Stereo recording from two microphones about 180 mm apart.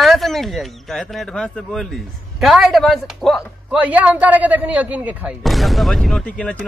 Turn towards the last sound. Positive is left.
turn(degrees=5)  # may be behind; listen again after turning